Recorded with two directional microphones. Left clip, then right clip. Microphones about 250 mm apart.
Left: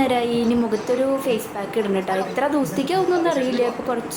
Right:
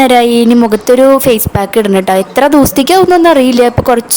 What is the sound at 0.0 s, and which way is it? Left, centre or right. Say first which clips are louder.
A woman's voice: right 14 dB; right.